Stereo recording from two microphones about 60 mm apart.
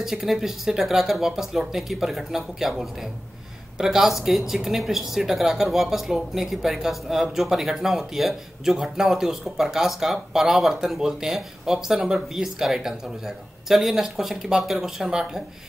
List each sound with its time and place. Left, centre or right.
0.0 s speech: centre